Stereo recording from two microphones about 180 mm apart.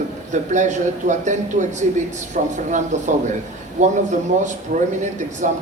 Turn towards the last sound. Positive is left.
turn(degrees=-45)  # may be behind; listen again after turning